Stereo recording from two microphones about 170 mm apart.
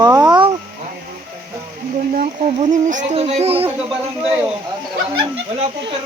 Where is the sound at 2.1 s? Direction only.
45° right (ahead or behind).